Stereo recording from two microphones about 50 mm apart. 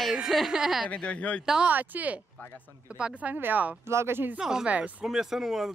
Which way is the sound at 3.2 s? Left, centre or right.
Right.